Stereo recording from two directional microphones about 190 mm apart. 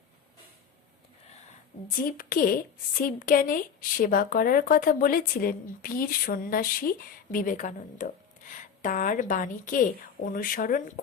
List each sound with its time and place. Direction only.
1.9 s a woman's voice: 50° left (ahead or behind)